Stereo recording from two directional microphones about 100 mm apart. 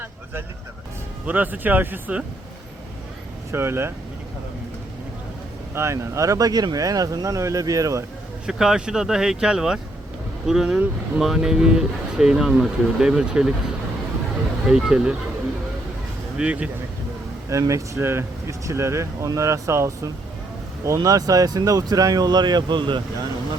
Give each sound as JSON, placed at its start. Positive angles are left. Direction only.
{"t": 1.2, "sound": "speech", "side_deg": -15}
{"t": 3.5, "sound": "speech", "side_deg": -25}
{"t": 5.7, "sound": "speech", "side_deg": -30}
{"t": 8.4, "sound": "speech", "side_deg": -5}
{"t": 14.7, "sound": "speech", "side_deg": -5}
{"t": 16.4, "sound": "speech", "side_deg": -10}
{"t": 17.5, "sound": "speech", "side_deg": -30}